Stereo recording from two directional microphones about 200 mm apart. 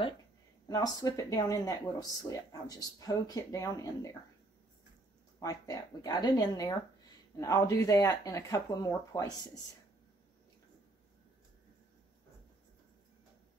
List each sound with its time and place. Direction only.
0.7 s speech: 20° left (ahead or behind)
5.4 s speech: 20° left (ahead or behind)